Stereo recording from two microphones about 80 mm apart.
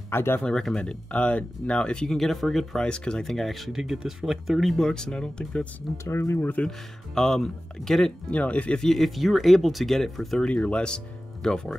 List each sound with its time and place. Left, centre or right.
0.1 s speech: left
0.4 s speech: centre
6.0 s speech: left
7.2 s speech: centre
8.4 s speech: centre
8.8 s speech: centre